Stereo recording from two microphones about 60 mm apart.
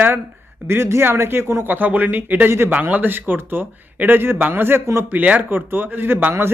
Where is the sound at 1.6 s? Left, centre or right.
Right.